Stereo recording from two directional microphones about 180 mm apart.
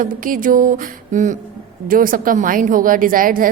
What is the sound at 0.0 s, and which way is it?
A woman's voice, 50° right (ahead or behind).